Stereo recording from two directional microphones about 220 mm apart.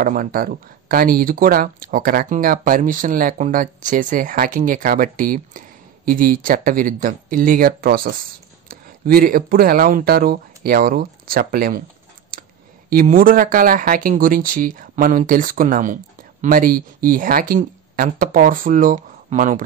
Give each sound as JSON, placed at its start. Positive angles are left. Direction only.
{"t": 0.0, "sound": "speech", "side_deg": -40}
{"t": 12.9, "sound": "speech", "side_deg": -40}